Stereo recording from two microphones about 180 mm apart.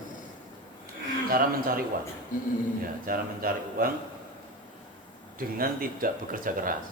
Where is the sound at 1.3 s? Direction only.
55° right (ahead or behind).